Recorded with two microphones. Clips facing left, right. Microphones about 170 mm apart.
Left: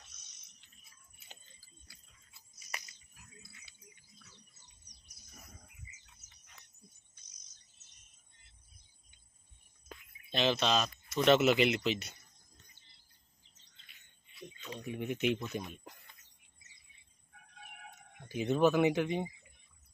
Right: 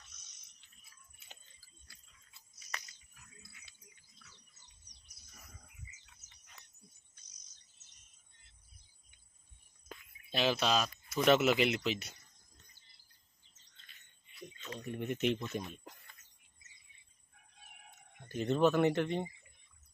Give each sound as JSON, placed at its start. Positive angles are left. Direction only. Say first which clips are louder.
{"t": 2.7, "sound": "a sound", "louder": "even", "side_deg": 10}
{"t": 10.3, "sound": "speech", "louder": "left 1 dB", "side_deg": -5}
{"t": 14.8, "sound": "speech", "louder": "even", "side_deg": 0}
{"t": 18.3, "sound": "speech", "louder": "left 1 dB", "side_deg": 5}